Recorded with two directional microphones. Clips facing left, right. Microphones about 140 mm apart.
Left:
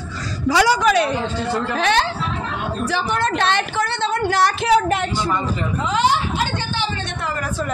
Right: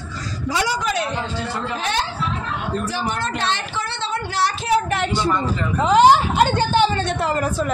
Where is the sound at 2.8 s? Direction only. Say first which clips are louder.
Left 3 dB; 65° left (ahead or behind); by 4.7 s 50° left (ahead or behind).